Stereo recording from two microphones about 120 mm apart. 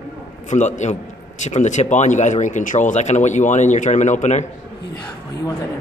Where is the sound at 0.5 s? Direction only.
90° left.